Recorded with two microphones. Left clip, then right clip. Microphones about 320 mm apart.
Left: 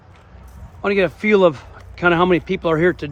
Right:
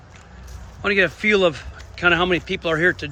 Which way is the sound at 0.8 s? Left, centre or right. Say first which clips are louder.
Even; centre.